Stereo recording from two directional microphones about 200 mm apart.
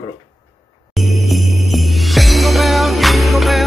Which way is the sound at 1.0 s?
Centre (ahead or behind).